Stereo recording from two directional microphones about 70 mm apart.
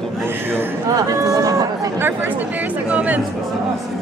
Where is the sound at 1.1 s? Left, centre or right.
Right.